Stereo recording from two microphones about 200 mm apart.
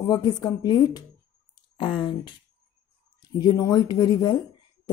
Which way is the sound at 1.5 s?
25° left (ahead or behind).